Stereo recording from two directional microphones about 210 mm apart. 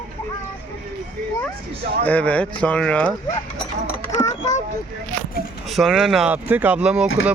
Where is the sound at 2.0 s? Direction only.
5° left (ahead or behind).